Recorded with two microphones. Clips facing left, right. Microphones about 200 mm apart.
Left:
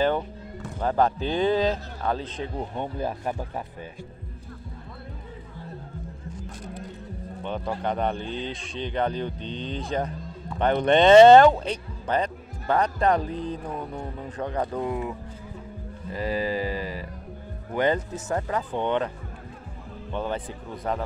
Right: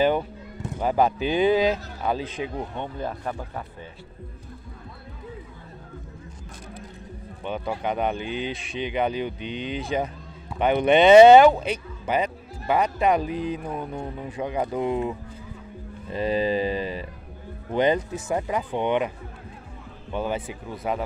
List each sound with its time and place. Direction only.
0.0 s speech: 10° right (ahead or behind)
2.7 s speech: 10° left (ahead or behind)
7.4 s speech: 5° right (ahead or behind)
14.9 s music: 20° right (ahead or behind)
17.7 s speech: 15° right (ahead or behind)